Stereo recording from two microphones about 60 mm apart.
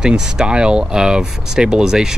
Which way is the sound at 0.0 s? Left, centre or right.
Centre.